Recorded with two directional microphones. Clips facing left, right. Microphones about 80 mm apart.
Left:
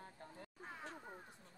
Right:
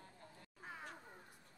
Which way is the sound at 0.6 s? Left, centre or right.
Centre.